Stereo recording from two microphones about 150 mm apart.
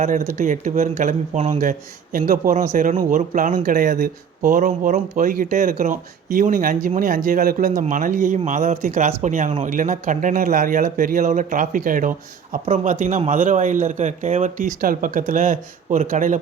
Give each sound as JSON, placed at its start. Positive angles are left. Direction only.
{"t": 0.0, "sound": "speech", "side_deg": -60}
{"t": 12.6, "sound": "speech", "side_deg": -55}